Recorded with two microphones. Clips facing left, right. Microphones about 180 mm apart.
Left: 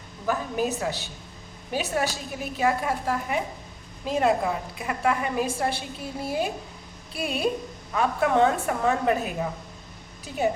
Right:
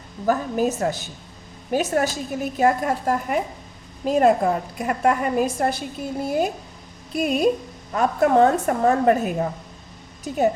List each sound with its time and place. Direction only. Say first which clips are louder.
0.3 s a woman's voice: right 5 dB; 45° right (ahead or behind)